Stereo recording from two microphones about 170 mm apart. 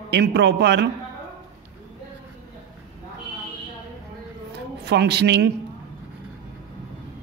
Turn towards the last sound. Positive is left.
turn(degrees=-80)